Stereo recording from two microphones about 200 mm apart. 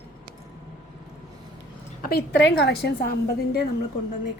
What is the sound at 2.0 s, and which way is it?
A woman's voice, 55° left (ahead or behind).